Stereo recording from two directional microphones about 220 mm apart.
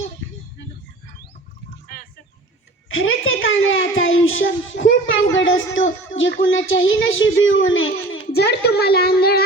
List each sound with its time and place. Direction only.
2.9 s a child's voice: 65° left (ahead or behind)
8.3 s a child's voice: 45° left (ahead or behind)